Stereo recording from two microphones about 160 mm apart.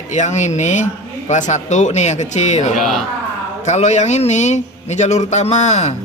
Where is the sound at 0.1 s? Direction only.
45° left (ahead or behind).